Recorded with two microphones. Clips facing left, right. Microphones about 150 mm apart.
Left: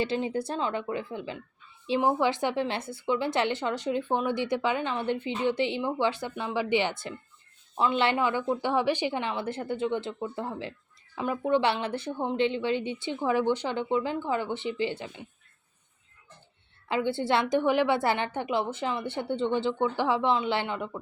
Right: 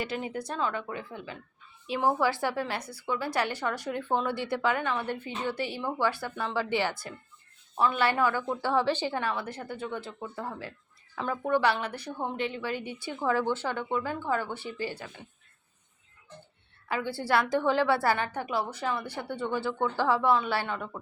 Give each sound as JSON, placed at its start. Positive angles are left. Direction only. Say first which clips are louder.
{"t": 0.0, "sound": "a woman's voice", "louder": "left 5 dB", "side_deg": 25}
{"t": 16.9, "sound": "a woman's voice", "louder": "left 2 dB", "side_deg": 25}